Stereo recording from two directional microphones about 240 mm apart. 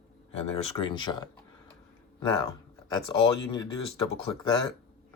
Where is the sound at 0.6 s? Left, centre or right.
Left.